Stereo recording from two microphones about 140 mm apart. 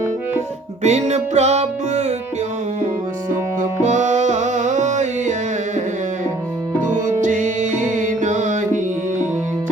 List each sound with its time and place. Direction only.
0.8 s music: 55° right (ahead or behind)
3.6 s music: 60° right (ahead or behind)
6.8 s music: 65° right (ahead or behind)